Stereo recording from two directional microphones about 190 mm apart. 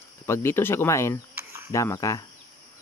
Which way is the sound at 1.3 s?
15° right (ahead or behind).